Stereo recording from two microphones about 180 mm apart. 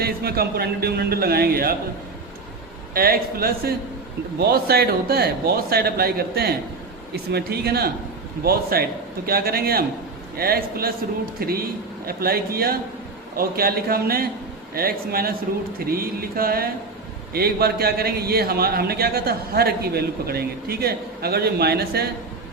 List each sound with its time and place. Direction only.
0.0 s a man's voice: 60° right (ahead or behind)
2.9 s a man's voice: 55° right (ahead or behind)